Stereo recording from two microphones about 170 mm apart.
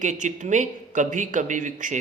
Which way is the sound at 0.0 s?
45° right (ahead or behind).